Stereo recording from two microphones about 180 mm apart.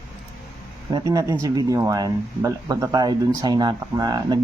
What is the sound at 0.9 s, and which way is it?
Speech, 20° right (ahead or behind).